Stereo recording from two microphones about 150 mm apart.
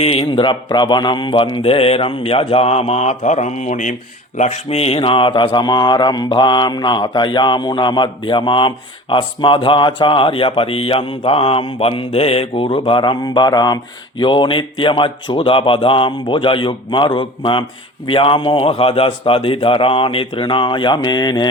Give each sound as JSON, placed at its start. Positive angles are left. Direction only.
{"t": 0.0, "sound": "speech", "side_deg": 40}